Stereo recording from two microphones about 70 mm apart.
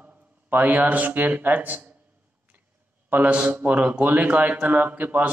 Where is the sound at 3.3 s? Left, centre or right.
Centre.